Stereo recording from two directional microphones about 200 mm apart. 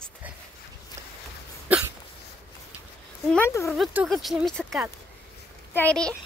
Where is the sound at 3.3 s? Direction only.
10° left (ahead or behind).